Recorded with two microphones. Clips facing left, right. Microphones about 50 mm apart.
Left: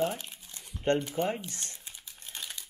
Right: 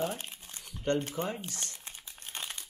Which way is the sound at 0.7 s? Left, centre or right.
Left.